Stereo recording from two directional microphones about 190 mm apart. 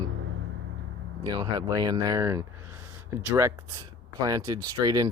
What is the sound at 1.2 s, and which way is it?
Speech, 25° right (ahead or behind).